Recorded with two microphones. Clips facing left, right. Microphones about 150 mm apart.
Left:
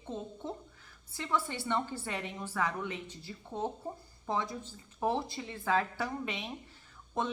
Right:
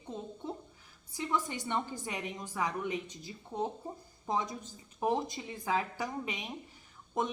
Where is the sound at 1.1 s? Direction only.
15° right (ahead or behind).